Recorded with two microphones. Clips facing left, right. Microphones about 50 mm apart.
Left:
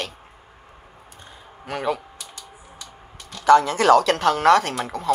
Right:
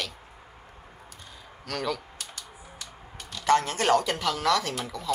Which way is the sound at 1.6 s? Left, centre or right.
Left.